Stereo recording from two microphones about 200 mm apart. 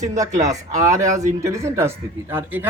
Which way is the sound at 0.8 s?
15° right (ahead or behind).